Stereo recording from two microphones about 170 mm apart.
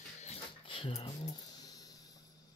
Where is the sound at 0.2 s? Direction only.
35° left (ahead or behind).